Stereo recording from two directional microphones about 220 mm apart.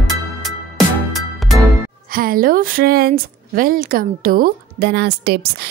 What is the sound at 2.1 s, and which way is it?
A woman's voice, 40° right (ahead or behind).